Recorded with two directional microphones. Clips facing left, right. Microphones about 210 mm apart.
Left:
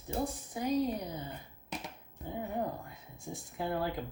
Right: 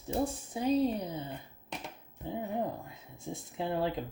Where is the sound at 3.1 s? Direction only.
25° right (ahead or behind).